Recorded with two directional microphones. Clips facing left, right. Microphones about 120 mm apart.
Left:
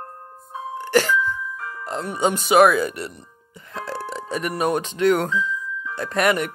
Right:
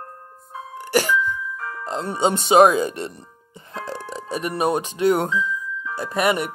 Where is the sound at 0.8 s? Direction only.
15° right (ahead or behind).